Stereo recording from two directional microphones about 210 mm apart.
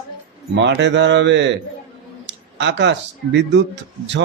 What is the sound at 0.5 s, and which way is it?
A man's voice, 55° right (ahead or behind).